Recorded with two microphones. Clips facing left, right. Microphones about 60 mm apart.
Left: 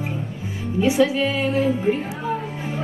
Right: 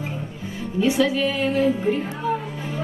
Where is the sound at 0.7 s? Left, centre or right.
Left.